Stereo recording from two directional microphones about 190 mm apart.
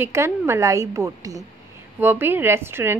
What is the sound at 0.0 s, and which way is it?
A woman's voice, 15° right (ahead or behind).